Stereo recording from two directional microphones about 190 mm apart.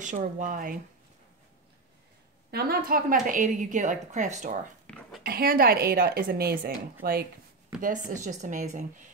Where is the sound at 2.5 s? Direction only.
55° right (ahead or behind); by 4.5 s 40° right (ahead or behind).